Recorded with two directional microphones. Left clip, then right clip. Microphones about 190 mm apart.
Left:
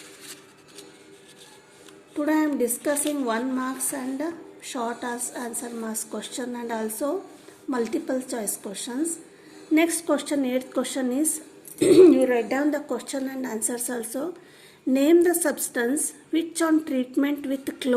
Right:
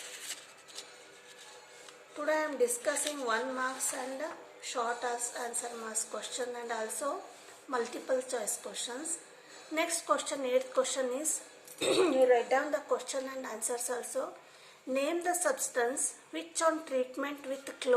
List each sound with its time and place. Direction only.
2.2 s a woman's voice: 45° left (ahead or behind)